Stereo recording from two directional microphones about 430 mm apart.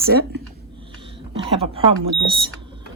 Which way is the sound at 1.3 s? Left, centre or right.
Centre.